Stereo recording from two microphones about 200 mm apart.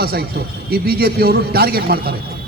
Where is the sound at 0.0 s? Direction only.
50° right (ahead or behind).